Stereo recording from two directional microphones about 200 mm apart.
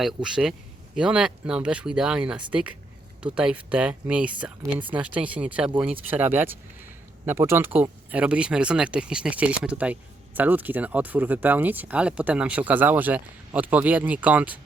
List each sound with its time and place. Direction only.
0.0 s speech: 5° right (ahead or behind)